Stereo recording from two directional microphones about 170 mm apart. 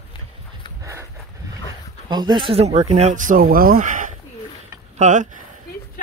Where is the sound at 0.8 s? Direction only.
20° right (ahead or behind).